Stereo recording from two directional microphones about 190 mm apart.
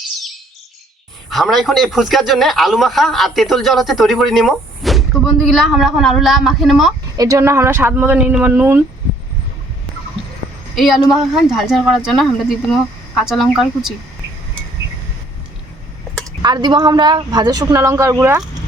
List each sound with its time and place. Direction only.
1.3 s a man's voice: centre (ahead or behind)
7.2 s speech: 15° right (ahead or behind)
10.8 s a man's voice: centre (ahead or behind)
16.2 s speech: 20° right (ahead or behind)